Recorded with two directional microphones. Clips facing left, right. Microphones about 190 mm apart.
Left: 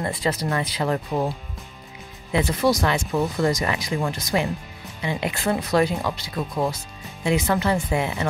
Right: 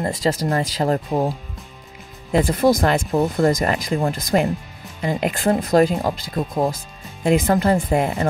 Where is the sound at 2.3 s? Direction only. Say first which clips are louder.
Right 4 dB; 50° right (ahead or behind).